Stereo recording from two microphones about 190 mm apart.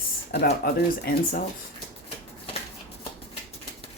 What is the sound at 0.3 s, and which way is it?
Speech, 55° left (ahead or behind).